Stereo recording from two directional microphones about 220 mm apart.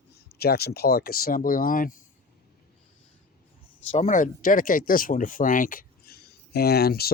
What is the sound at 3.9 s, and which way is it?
Speech, 35° left (ahead or behind).